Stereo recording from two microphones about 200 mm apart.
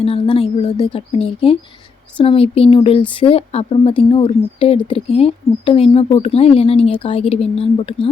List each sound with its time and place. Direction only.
0.0 s a woman's voice: 30° left (ahead or behind)